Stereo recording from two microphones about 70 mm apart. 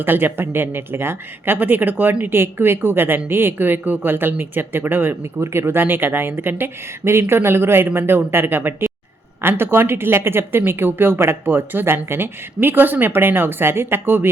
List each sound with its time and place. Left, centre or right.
0.0 s speech: right